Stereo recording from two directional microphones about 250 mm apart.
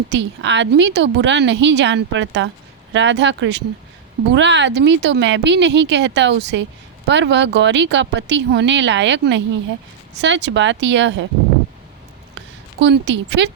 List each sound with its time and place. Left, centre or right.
0.1 s speech: right
12.8 s speech: right